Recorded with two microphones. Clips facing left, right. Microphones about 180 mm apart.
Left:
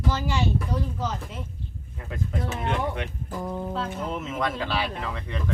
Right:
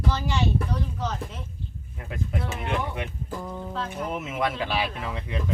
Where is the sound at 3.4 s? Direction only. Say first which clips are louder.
Left 4 dB; 20° left (ahead or behind).